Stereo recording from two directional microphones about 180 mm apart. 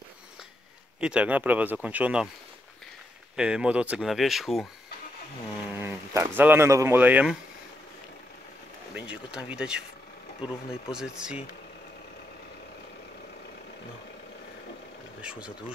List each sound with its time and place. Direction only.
1.0 s speech: 5° right (ahead or behind)
3.3 s speech: 5° right (ahead or behind)
5.7 s speech: 10° right (ahead or behind)
8.9 s speech: 5° right (ahead or behind)
10.4 s speech: 25° left (ahead or behind)
10.9 s speech: 5° right (ahead or behind)